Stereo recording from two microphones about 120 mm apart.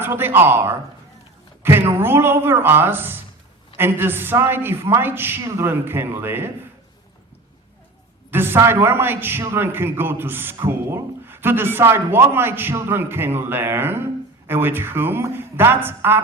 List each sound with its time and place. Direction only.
0.0 s a man's voice: 20° right (ahead or behind)
8.3 s a man's voice: 20° right (ahead or behind)